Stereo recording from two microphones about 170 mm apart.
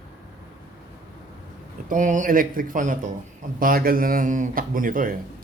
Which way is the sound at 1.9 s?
50° right (ahead or behind).